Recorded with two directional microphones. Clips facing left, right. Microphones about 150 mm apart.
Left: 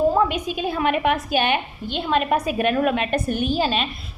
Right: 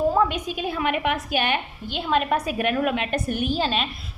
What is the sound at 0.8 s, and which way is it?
Speech, 40° left (ahead or behind).